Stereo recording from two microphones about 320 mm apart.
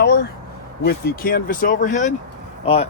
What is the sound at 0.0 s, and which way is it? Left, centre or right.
Speech, left.